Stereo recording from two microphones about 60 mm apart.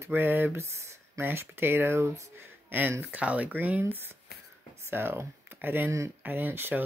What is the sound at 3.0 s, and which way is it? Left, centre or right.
Speech, right.